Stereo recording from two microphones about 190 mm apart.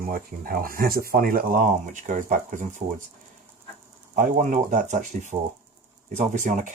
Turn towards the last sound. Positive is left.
turn(degrees=-40)  # may be behind; listen again after turning